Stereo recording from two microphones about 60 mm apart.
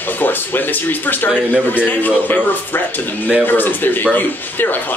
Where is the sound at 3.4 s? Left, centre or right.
Left.